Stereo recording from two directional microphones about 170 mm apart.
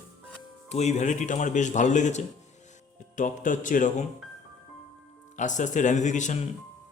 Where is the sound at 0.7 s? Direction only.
40° left (ahead or behind).